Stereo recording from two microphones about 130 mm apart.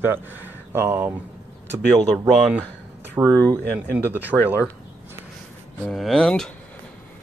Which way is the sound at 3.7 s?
15° right (ahead or behind).